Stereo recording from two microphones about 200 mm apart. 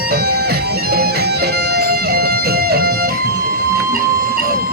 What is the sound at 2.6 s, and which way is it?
Music, 50° right (ahead or behind).